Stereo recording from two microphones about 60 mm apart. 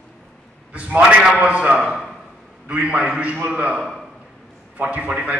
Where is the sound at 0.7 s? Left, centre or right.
Right.